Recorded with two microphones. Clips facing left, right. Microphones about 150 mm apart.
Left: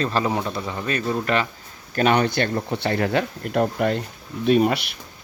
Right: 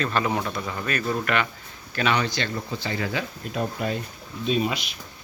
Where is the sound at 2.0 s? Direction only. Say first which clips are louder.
Left 5 dB; 50° left (ahead or behind).